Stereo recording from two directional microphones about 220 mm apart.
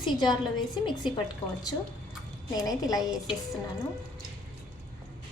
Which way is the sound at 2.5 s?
15° left (ahead or behind).